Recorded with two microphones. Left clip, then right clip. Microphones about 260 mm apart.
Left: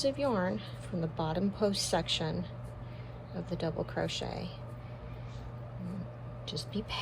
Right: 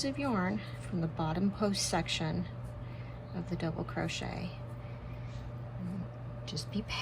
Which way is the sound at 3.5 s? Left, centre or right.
Centre.